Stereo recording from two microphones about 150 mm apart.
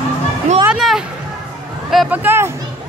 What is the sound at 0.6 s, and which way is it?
Music, 5° right (ahead or behind).